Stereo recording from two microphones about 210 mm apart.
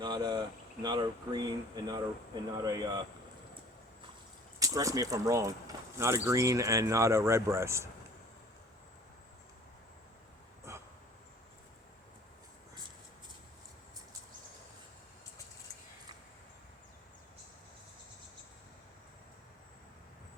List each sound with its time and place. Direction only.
0.0 s speech: 20° right (ahead or behind)
4.6 s speech: 15° right (ahead or behind)
10.7 s a sound: 10° right (ahead or behind)